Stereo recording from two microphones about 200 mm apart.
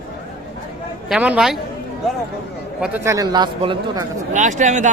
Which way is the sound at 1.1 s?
5° right (ahead or behind).